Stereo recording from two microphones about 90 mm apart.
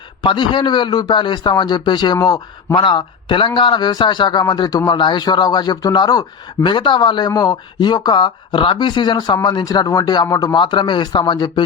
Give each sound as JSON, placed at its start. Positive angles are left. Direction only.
{"t": 0.2, "sound": "a man's voice", "side_deg": 60}
{"t": 6.6, "sound": "speech", "side_deg": 65}
{"t": 10.6, "sound": "a man's voice", "side_deg": 60}